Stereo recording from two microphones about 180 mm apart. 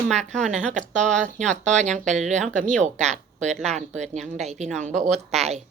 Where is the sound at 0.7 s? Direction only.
40° right (ahead or behind).